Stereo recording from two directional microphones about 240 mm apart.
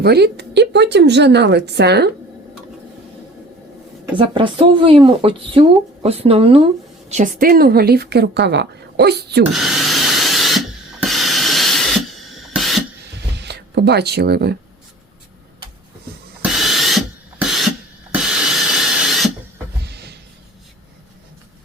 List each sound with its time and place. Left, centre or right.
0.0 s a woman's voice: right
4.2 s a woman's voice: right
9.4 s rub: centre
12.5 s beatboxing: centre
13.3 s speech: right
16.4 s owl: centre
17.4 s a sound: centre
18.1 s rub: centre
19.8 s a sound: right